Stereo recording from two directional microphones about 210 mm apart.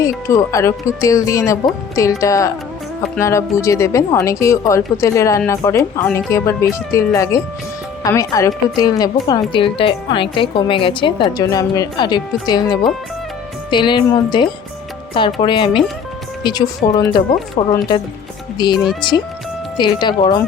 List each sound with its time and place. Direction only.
0.0 s a woman's voice: 15° left (ahead or behind)